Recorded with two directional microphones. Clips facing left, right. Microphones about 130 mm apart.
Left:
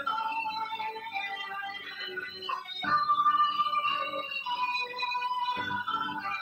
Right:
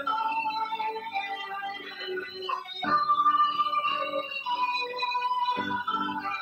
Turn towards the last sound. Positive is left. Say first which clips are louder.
# right 3 dB
turn(degrees=-30)  # may be behind; listen again after turning